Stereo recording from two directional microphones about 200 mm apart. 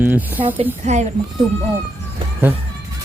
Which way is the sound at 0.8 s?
35° right (ahead or behind).